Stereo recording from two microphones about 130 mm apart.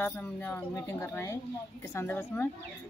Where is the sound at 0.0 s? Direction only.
15° left (ahead or behind).